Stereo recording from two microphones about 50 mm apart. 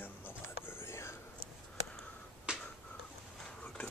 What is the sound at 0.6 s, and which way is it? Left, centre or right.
Whispering, left.